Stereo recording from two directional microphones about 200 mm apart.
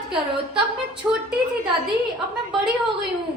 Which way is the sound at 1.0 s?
5° right (ahead or behind).